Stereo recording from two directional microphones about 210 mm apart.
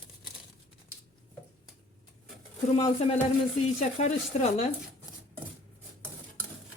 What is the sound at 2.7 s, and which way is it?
Speech, 30° left (ahead or behind).